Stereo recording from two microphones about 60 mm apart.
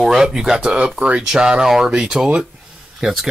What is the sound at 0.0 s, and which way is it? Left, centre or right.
Speech, centre.